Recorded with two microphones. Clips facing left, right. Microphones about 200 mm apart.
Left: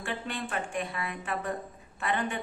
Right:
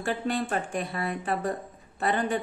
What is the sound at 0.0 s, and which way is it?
A woman's voice, 40° right (ahead or behind).